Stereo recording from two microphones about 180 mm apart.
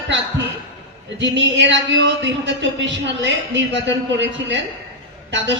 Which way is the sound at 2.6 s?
85° right.